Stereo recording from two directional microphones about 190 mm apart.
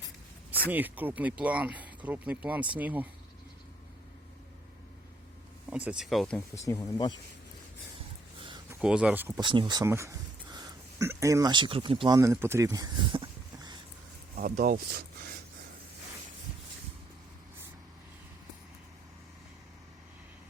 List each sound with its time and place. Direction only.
0.7 s speech: 10° right (ahead or behind)
5.7 s speech: 5° right (ahead or behind)
6.7 s speech: 20° left (ahead or behind)
8.7 s speech: 5° right (ahead or behind)
9.4 s speech: 25° right (ahead or behind)
14.3 s speech: 45° right (ahead or behind)